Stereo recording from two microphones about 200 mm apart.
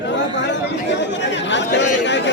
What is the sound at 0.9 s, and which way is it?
Speech, 65° left (ahead or behind).